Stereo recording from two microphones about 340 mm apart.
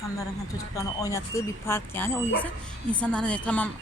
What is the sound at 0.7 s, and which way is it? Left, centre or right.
Speech, centre.